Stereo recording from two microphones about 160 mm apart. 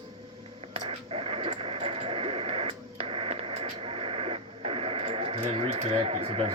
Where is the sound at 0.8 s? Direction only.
35° right (ahead or behind).